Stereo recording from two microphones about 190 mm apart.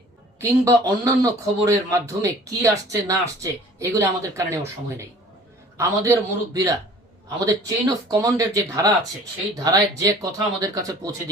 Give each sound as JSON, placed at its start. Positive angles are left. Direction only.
{"t": 0.3, "sound": "speech", "side_deg": -15}
{"t": 5.7, "sound": "speech", "side_deg": -15}